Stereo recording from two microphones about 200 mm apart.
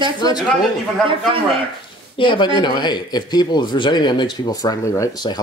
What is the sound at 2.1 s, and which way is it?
Speech, 25° left (ahead or behind).